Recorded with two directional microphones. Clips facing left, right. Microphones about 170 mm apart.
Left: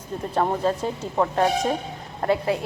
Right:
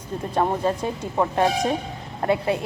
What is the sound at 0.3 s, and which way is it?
Speech, 15° right (ahead or behind).